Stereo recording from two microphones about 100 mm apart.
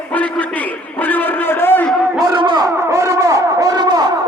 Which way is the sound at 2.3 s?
50° right (ahead or behind).